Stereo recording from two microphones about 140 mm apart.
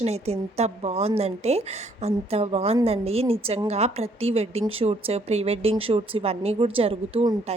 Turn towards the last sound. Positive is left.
turn(degrees=-45)  # may be behind; listen again after turning